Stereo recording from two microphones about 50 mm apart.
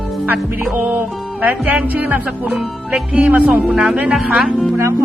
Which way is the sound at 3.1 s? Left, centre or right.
Right.